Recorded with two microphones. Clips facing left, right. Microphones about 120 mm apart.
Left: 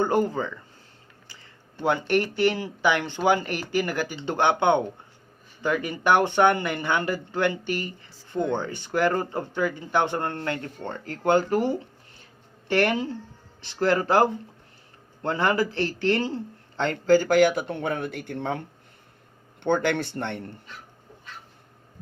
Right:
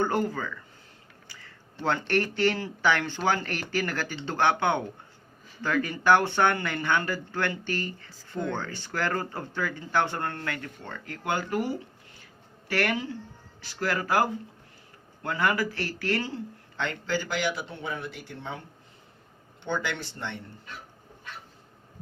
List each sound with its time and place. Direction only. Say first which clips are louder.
0.0 s speech: left 4 dB; 20° left (ahead or behind)
1.8 s speech: left 3 dB; 15° left (ahead or behind); by 18.6 s 60° left (ahead or behind)
19.6 s speech: left 8 dB; 55° left (ahead or behind)